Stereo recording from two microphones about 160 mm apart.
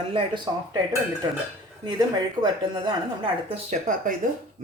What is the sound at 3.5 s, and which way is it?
Speech, 50° right (ahead or behind).